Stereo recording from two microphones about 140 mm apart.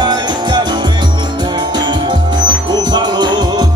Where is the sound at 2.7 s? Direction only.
30° right (ahead or behind).